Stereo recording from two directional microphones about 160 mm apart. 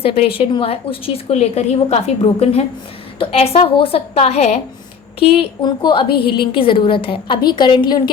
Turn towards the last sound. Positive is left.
turn(degrees=30)  # may be behind; listen again after turning